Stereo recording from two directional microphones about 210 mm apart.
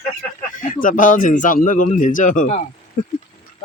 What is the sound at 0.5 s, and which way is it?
Speech, 40° left (ahead or behind).